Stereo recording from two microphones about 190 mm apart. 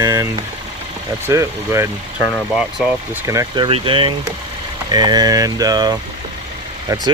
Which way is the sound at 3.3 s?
20° right (ahead or behind).